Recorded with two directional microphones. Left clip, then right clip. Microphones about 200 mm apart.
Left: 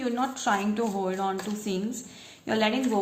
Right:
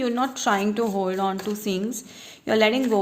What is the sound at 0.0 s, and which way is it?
A woman's voice, 45° right (ahead or behind).